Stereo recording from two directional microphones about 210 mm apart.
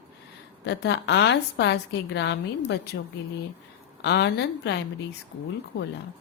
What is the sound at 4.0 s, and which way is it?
Speech, 50° left (ahead or behind).